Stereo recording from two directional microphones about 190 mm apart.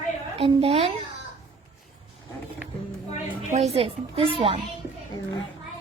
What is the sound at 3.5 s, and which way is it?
A woman's voice, 35° right (ahead or behind).